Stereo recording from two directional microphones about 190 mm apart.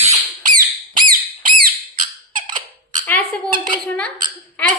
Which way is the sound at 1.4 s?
45° right (ahead or behind).